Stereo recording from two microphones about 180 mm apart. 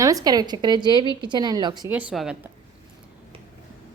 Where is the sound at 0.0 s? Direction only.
20° right (ahead or behind).